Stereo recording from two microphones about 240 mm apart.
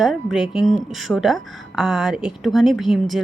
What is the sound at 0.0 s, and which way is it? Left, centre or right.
A woman's voice, centre.